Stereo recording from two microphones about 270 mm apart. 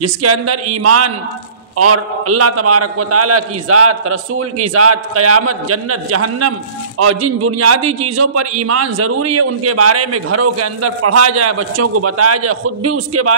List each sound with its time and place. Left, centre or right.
0.2 s a man's voice: right